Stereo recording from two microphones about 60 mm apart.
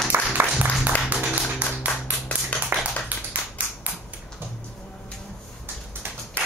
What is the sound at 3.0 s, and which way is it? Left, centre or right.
Tap, right.